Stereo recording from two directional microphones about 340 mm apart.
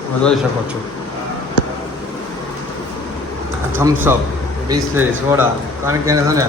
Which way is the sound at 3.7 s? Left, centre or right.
Centre.